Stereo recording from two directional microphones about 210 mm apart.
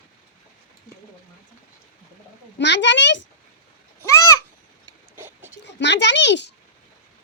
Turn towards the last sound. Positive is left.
turn(degrees=55)  # may be behind; listen again after turning